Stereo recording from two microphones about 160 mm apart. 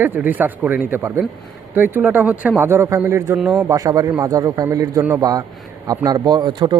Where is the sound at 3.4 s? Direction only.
5° right (ahead or behind).